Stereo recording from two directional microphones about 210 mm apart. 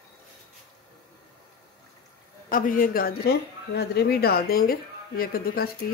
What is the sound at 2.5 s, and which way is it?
Speech, 40° left (ahead or behind).